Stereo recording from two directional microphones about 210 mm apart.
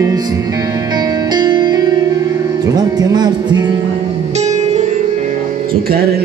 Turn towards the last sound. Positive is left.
turn(degrees=-30)  # may be behind; listen again after turning